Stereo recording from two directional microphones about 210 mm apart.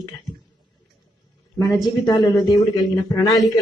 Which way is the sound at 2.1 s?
20° left (ahead or behind).